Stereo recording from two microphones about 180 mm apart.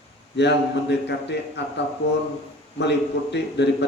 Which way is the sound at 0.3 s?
70° left (ahead or behind).